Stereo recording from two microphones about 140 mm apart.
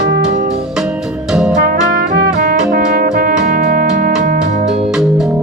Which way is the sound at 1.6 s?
90° right.